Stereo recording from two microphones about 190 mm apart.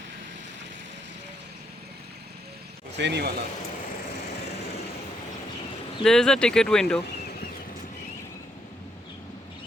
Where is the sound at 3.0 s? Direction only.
65° right (ahead or behind).